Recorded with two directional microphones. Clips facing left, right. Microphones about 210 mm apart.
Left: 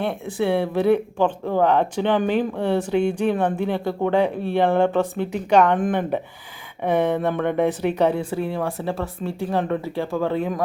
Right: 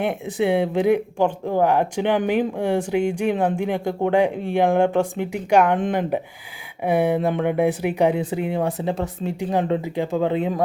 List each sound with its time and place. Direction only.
0.0 s speech: 15° right (ahead or behind)